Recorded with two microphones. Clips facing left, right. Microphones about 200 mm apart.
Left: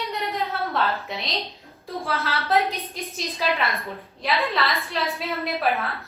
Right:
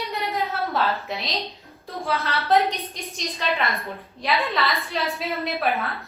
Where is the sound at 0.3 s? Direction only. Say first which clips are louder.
Right 1 dB; centre (ahead or behind).